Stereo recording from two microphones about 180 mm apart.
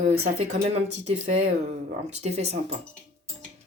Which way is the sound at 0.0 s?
35° right (ahead or behind).